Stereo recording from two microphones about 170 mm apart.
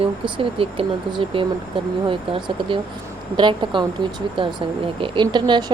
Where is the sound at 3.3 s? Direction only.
25° right (ahead or behind).